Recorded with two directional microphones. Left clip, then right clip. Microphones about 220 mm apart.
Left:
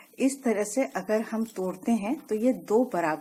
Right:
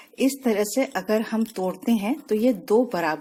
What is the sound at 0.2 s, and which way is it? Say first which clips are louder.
Speech: right 4 dB; 45° right (ahead or behind).